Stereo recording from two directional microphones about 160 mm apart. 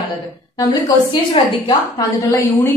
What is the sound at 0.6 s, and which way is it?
A woman's voice, 25° left (ahead or behind).